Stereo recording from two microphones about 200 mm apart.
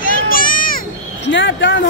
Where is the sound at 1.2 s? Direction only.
65° left (ahead or behind).